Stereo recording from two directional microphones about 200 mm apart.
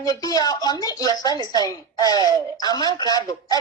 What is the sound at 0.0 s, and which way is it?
Speech, 20° left (ahead or behind).